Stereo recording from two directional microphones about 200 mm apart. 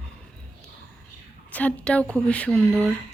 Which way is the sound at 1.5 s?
5° left (ahead or behind).